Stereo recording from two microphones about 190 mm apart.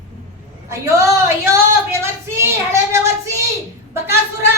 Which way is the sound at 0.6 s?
15° right (ahead or behind).